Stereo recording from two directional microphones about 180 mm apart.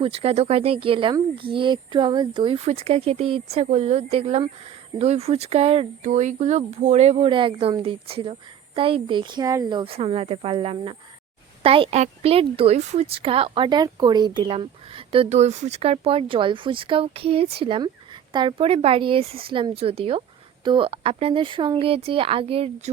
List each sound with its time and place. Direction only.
0.0 s speech: 30° right (ahead or behind)